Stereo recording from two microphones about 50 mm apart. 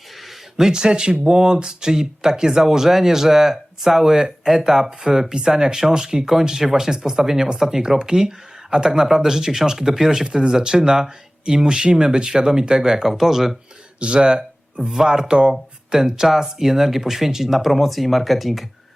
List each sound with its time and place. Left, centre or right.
0.3 s speech: centre
14.0 s speech: centre